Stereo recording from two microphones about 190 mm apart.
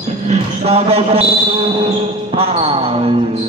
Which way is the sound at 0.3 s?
35° right (ahead or behind).